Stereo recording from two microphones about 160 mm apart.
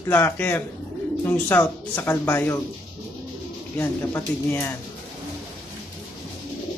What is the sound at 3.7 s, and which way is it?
Speech, 15° left (ahead or behind).